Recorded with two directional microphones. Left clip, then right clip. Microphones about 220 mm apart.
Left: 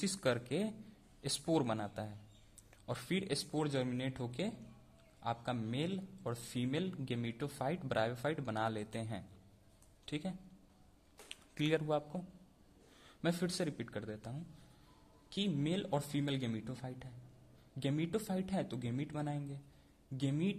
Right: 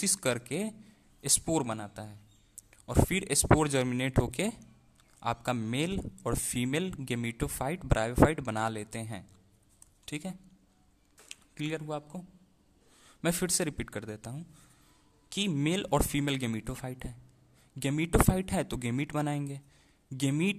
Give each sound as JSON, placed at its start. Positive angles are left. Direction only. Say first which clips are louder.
{"t": 0.0, "sound": "a man's voice", "louder": "right 5 dB", "side_deg": -25}
{"t": 13.0, "sound": "a man's voice", "louder": "right 6 dB", "side_deg": -30}